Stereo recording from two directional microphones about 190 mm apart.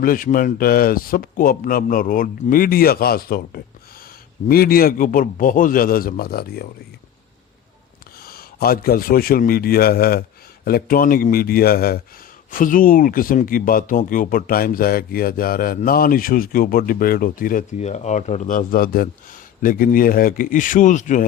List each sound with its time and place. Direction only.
0.0 s speech: 50° left (ahead or behind)
8.2 s a man's voice: 50° left (ahead or behind)